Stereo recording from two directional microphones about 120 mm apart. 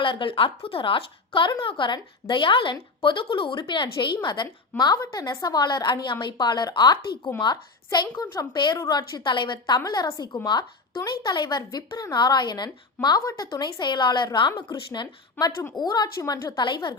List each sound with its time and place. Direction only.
0.0 s a woman's voice: 45° left (ahead or behind)
4.9 s speech: 30° left (ahead or behind)